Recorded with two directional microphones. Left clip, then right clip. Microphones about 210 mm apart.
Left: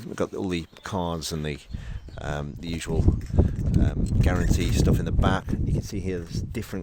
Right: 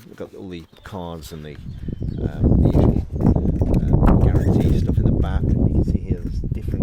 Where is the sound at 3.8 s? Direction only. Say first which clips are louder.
Right 9 dB; 40° left (ahead or behind).